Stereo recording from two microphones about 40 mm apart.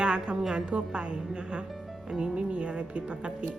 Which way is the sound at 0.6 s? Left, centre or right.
Right.